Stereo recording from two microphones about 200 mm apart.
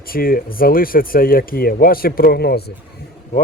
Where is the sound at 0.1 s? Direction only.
45° left (ahead or behind).